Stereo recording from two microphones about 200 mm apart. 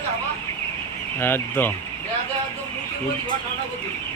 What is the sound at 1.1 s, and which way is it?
Speech, 10° left (ahead or behind).